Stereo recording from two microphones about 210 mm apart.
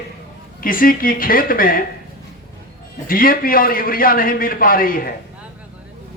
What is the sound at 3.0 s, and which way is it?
A man's voice, 45° left (ahead or behind).